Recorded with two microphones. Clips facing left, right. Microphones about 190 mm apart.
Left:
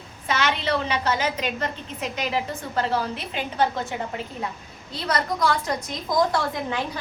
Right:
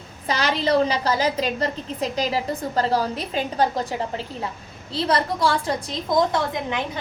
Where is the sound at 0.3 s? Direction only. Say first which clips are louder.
Right 3 dB; 35° right (ahead or behind).